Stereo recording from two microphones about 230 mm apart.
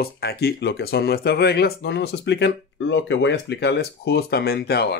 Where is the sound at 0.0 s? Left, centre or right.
Left.